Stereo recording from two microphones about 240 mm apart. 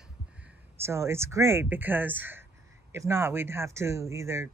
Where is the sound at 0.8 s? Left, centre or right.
Centre.